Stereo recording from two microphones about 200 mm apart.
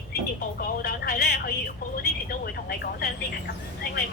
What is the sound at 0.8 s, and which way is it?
Speech, 50° left (ahead or behind).